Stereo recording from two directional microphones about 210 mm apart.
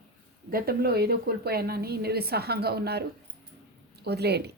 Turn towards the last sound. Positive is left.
turn(degrees=-50)  # may be behind; listen again after turning